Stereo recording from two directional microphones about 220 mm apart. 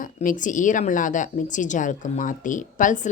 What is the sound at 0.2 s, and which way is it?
A woman's voice, 35° left (ahead or behind).